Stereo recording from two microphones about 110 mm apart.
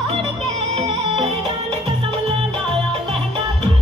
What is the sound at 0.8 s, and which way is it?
Music, 50° right (ahead or behind).